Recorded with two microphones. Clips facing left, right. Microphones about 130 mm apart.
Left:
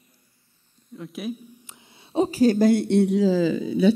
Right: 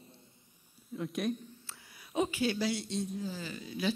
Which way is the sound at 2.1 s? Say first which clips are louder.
Left 12 dB; 35° left (ahead or behind).